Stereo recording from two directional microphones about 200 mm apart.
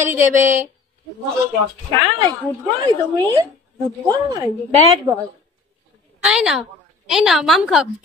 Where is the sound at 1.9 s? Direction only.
25° right (ahead or behind).